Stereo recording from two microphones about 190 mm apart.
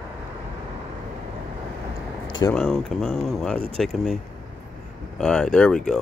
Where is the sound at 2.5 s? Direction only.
Centre (ahead or behind).